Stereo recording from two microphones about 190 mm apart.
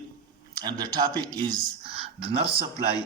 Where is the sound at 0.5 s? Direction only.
20° right (ahead or behind).